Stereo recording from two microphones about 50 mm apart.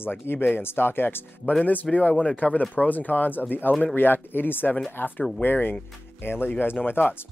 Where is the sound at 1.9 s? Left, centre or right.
Left.